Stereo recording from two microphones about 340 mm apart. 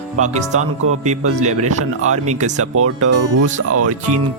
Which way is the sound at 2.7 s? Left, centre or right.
Right.